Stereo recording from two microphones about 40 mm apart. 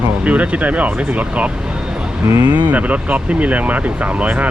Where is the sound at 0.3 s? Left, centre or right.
Right.